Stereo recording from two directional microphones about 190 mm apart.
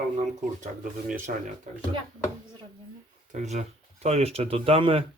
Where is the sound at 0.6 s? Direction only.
40° right (ahead or behind).